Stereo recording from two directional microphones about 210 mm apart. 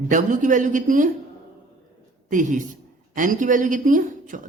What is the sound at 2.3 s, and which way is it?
A woman's voice, 35° right (ahead or behind).